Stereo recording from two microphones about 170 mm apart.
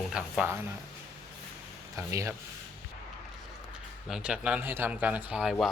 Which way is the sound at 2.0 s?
15° right (ahead or behind).